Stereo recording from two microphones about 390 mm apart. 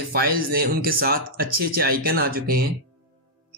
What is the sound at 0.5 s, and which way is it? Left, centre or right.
Speech, right.